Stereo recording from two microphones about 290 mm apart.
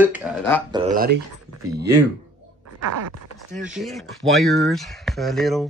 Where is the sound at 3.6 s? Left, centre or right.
Centre.